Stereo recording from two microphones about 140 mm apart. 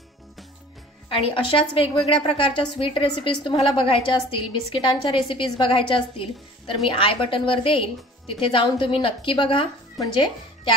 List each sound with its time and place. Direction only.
1.1 s a woman's voice: 40° left (ahead or behind)